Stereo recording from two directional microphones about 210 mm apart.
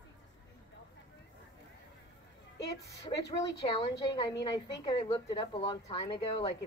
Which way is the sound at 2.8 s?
15° left (ahead or behind).